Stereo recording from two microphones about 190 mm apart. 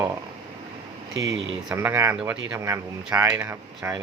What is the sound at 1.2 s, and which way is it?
Speech, 85° right.